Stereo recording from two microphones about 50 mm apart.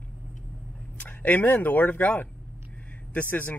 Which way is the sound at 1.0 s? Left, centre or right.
Left.